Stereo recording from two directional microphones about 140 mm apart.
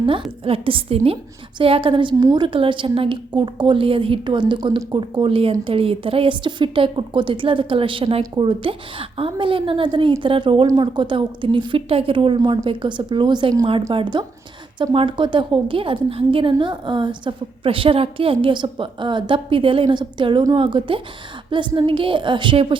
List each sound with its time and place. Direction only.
0.0 s a woman's voice: 40° right (ahead or behind)